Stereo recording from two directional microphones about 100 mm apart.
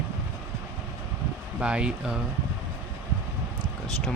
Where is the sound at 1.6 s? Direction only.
10° right (ahead or behind).